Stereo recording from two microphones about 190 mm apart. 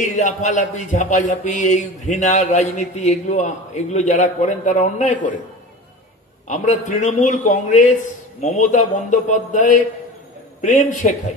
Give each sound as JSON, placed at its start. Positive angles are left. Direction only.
{"t": 0.0, "sound": "a man's voice", "side_deg": 40}
{"t": 6.4, "sound": "a man's voice", "side_deg": 40}